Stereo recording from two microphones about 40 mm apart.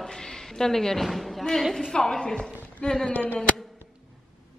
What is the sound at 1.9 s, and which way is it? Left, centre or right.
A woman's voice, centre.